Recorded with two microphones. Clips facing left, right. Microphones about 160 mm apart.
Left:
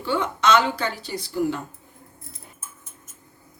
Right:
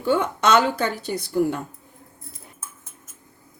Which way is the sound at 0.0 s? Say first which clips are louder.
Right 2 dB; 50° right (ahead or behind).